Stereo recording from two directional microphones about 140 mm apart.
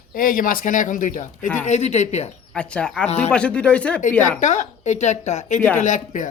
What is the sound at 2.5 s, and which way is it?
Speech, 5° left (ahead or behind).